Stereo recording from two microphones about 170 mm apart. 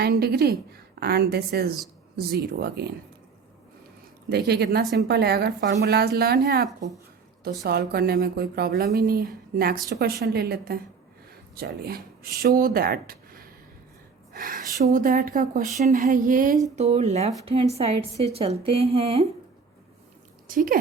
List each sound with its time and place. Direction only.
0.0 s a woman's voice: 70° right (ahead or behind)
4.3 s a woman's voice: 70° right (ahead or behind)
7.7 s a woman's voice: 65° right (ahead or behind); by 16.6 s 50° right (ahead or behind)
16.7 s a woman's voice: 40° right (ahead or behind)
20.5 s speech: 55° right (ahead or behind)